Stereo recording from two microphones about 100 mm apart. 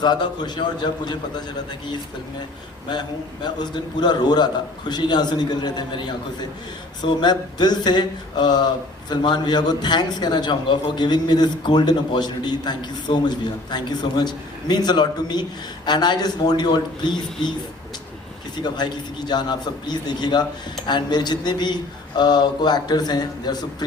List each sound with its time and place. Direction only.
0.0 s speech: 45° left (ahead or behind)
2.9 s speech: 45° left (ahead or behind)
18.5 s speech: 45° left (ahead or behind)